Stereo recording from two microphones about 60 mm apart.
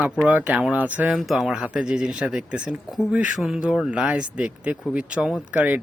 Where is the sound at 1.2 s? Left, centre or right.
Centre.